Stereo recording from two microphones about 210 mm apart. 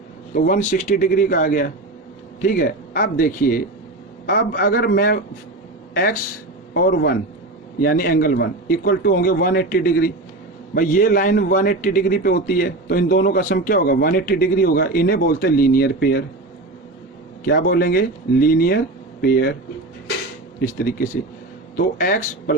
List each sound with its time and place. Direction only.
0.3 s a man's voice: 35° left (ahead or behind)
17.4 s a man's voice: 50° left (ahead or behind)
20.6 s a man's voice: 45° left (ahead or behind)